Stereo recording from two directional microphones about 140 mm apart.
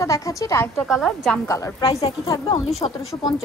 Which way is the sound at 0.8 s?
Centre (ahead or behind).